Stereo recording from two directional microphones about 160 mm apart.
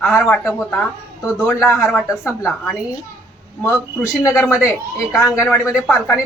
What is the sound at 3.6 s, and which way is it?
Speech, 15° left (ahead or behind).